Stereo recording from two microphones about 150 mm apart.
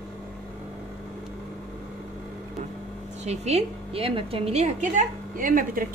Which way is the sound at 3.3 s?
45° right (ahead or behind).